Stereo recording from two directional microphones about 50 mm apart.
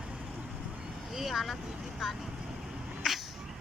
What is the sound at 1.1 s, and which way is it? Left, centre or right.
Speech, centre.